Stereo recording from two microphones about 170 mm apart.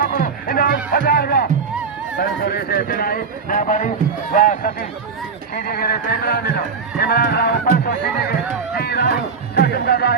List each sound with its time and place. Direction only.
0.0 s speech: 55° left (ahead or behind)
5.5 s speech: 60° left (ahead or behind)